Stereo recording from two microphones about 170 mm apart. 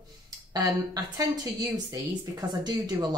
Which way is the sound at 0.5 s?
20° right (ahead or behind).